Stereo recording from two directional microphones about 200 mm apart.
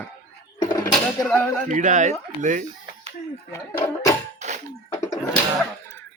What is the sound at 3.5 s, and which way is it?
Speech, 15° left (ahead or behind).